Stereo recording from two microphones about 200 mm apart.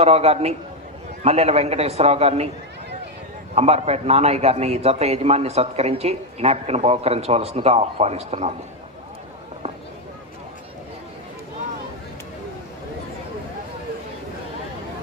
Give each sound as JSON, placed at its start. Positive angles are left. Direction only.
{"t": 0.0, "sound": "a man's voice", "side_deg": -30}
{"t": 3.5, "sound": "a man's voice", "side_deg": -30}